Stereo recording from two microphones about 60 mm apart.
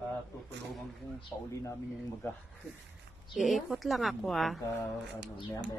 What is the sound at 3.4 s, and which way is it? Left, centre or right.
Speech, centre.